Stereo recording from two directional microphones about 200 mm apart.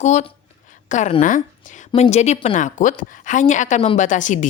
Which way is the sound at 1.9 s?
30° left (ahead or behind).